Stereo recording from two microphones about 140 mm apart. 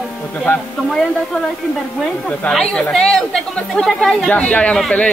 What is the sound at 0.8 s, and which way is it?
Speech, 5° left (ahead or behind).